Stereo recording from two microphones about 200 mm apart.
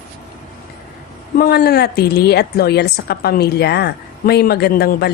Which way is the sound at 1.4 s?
50° left (ahead or behind).